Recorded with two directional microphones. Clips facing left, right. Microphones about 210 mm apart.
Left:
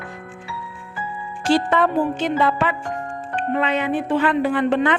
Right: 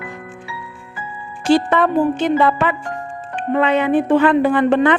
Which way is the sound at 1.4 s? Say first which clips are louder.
Right 3 dB; 55° right (ahead or behind).